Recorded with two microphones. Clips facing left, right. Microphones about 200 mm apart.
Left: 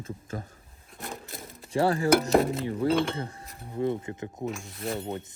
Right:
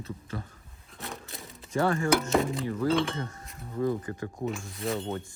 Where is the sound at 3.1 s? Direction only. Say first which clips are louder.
Left 1 dB; 30° left (ahead or behind).